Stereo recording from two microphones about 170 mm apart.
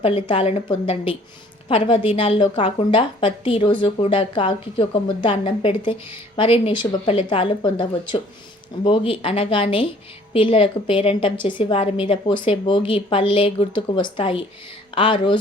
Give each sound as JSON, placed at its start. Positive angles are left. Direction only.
{"t": 0.0, "sound": "a woman's voice", "side_deg": 35}